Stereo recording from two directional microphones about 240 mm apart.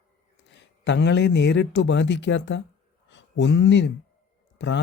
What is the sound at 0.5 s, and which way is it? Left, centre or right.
Speech, left.